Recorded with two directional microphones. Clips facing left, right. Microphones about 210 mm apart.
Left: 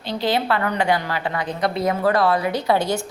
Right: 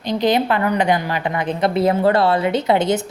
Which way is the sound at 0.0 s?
20° right (ahead or behind).